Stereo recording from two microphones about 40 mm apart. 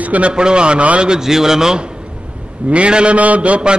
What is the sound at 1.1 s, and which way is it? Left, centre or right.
Speech, centre.